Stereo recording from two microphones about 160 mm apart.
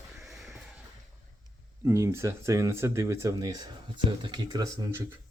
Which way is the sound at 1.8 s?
15° right (ahead or behind).